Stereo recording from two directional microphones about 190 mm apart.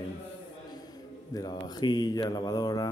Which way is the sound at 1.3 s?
20° left (ahead or behind).